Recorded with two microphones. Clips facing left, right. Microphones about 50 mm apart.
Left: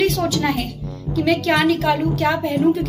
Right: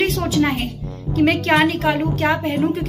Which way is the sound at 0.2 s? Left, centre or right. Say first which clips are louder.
Right 1 dB; centre.